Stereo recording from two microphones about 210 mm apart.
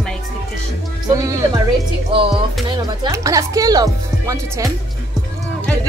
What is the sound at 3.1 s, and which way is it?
Speech, 15° right (ahead or behind).